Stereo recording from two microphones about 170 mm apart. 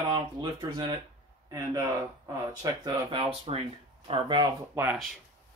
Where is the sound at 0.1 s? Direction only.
25° right (ahead or behind).